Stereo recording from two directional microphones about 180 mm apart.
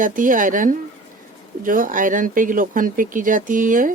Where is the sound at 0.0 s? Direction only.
50° right (ahead or behind).